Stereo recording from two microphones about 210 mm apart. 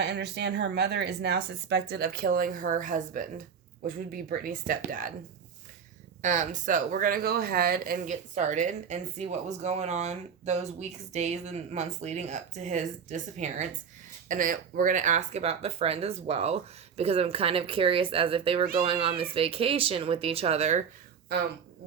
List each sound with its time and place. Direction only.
0.0 s speech: 55° right (ahead or behind)
6.2 s speech: 35° right (ahead or behind)